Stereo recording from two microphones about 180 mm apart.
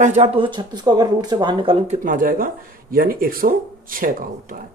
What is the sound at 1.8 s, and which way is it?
Speech, 45° right (ahead or behind).